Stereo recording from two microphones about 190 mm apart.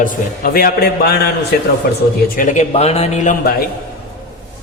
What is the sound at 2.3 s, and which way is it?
A man's voice, 45° left (ahead or behind).